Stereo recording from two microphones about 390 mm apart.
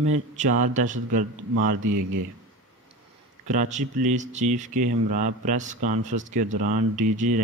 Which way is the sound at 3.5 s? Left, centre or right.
Centre.